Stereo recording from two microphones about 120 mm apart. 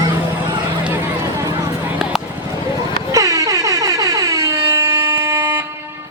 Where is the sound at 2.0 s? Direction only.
5° right (ahead or behind).